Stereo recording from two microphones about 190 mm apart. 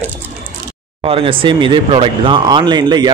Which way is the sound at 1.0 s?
30° right (ahead or behind).